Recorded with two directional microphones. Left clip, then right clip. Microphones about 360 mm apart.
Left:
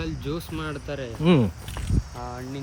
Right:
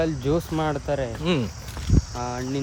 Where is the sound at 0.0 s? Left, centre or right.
Right.